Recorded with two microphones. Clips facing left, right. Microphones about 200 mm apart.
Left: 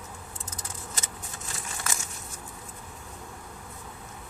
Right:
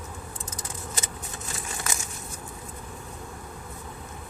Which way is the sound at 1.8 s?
15° right (ahead or behind).